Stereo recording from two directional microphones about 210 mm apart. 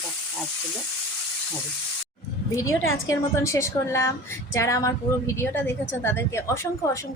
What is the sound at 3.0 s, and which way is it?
A woman's voice, 15° left (ahead or behind).